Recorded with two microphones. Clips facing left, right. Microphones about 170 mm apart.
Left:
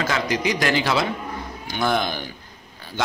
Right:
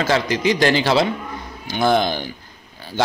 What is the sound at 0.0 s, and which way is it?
A man's voice, 30° right (ahead or behind).